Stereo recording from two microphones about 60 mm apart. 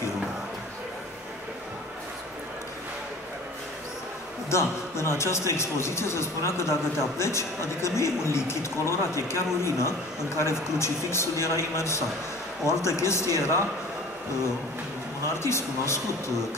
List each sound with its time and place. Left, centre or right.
4.5 s speech: left
15.2 s speech: left